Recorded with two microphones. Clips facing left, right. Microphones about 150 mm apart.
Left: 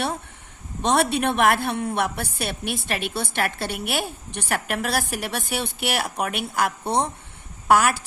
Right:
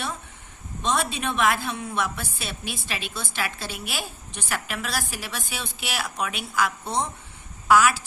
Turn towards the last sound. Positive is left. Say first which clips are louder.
# left 1 dB
turn(degrees=55)  # may be behind; listen again after turning